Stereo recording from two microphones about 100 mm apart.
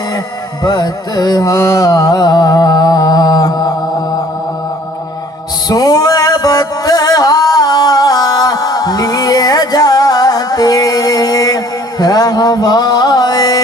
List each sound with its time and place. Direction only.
0.6 s music: 40° left (ahead or behind)
5.6 s music: 40° left (ahead or behind)